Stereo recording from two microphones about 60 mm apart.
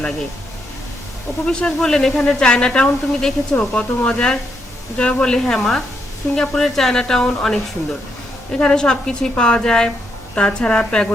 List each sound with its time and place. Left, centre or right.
1.5 s speech: centre